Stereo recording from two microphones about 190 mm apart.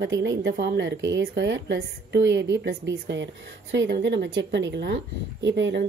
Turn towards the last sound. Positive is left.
turn(degrees=-70)  # may be behind; listen again after turning